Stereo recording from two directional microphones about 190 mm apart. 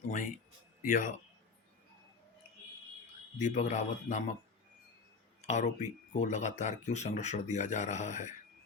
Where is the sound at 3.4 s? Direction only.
40° left (ahead or behind).